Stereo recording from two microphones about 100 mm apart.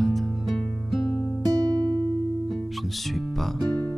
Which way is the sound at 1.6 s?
35° right (ahead or behind).